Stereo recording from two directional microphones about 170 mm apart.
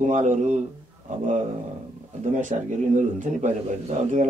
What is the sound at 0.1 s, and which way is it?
Speech, 45° right (ahead or behind).